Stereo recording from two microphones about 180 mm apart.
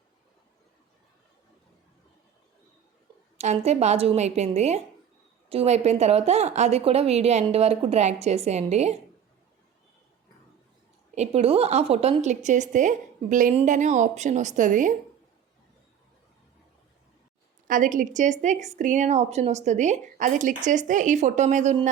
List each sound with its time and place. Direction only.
3.3 s a woman's voice: 40° right (ahead or behind)
11.1 s a woman's voice: 35° right (ahead or behind)
17.7 s a woman's voice: 45° right (ahead or behind)